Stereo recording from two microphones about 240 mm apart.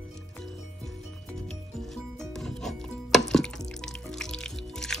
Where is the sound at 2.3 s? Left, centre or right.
Centre.